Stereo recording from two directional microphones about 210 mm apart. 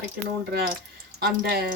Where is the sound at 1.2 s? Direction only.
45° right (ahead or behind).